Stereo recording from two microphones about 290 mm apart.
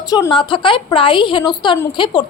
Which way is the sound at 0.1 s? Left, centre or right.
Centre.